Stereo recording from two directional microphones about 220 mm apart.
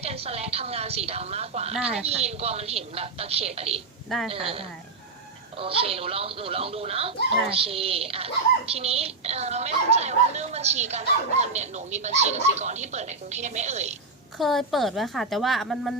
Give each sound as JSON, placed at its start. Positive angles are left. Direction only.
{"t": 0.0, "sound": "a woman's voice", "side_deg": -25}
{"t": 14.3, "sound": "a woman's voice", "side_deg": 0}